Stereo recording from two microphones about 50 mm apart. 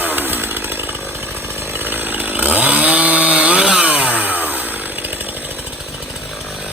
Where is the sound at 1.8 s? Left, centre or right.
Right.